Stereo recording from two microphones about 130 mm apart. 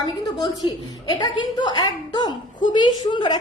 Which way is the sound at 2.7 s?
35° left (ahead or behind).